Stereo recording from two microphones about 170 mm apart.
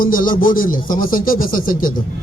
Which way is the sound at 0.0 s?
55° left (ahead or behind).